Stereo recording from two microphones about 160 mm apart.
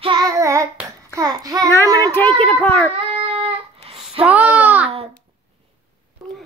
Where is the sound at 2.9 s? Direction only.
35° right (ahead or behind).